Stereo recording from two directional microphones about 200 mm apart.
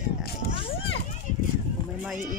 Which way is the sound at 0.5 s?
30° left (ahead or behind).